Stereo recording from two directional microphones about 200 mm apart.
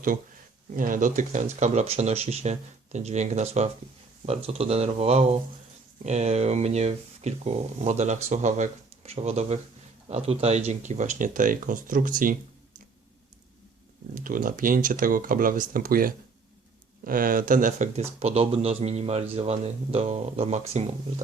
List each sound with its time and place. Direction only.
0.8 s speech: 40° right (ahead or behind)
14.2 s speech: 45° right (ahead or behind)